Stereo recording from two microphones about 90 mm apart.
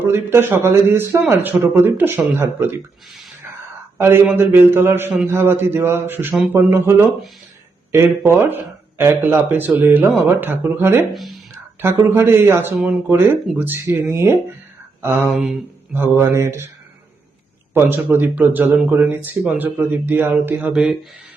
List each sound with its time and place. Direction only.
0.0 s speech: 25° right (ahead or behind)
3.9 s speech: 25° right (ahead or behind)
7.9 s speech: 30° right (ahead or behind)
11.5 s a sound: 25° right (ahead or behind)
12.0 s speech: 25° right (ahead or behind)
15.3 s a sound: 5° right (ahead or behind)
15.9 s speech: 25° right (ahead or behind)
17.7 s speech: 25° right (ahead or behind)